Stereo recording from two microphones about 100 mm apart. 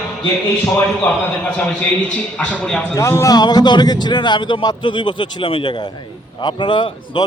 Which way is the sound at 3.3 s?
40° left (ahead or behind).